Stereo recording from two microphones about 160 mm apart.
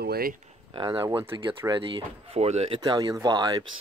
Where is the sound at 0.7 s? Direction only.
30° right (ahead or behind).